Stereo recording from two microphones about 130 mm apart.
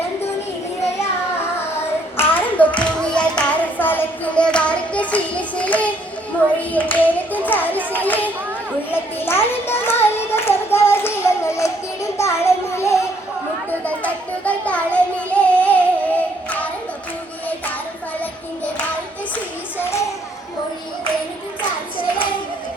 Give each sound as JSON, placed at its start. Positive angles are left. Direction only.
{"t": 0.9, "sound": "hands", "side_deg": 20}
{"t": 6.6, "sound": "a child's voice", "side_deg": 10}
{"t": 8.9, "sound": "hands", "side_deg": 15}
{"t": 13.7, "sound": "a sound", "side_deg": 10}
{"t": 18.2, "sound": "child singing", "side_deg": 10}